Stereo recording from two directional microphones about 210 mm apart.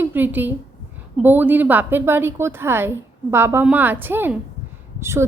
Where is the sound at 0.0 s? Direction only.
10° right (ahead or behind).